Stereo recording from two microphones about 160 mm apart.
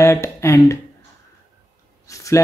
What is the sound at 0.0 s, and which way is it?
Speech, 20° left (ahead or behind).